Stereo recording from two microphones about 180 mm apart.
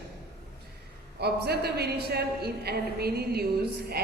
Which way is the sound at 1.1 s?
65° right (ahead or behind).